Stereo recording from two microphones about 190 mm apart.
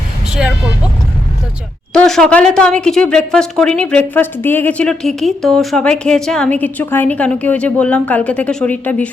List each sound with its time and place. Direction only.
1.9 s a woman's voice: 5° left (ahead or behind)